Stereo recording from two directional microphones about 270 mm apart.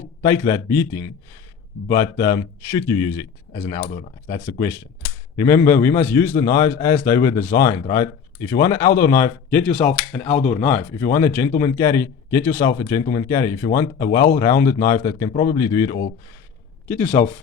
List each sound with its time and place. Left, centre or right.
0.2 s speech: centre
2.1 s speech: centre
3.5 s speech: left
5.4 s speech: centre
15.3 s speech: left
15.5 s a man's voice: centre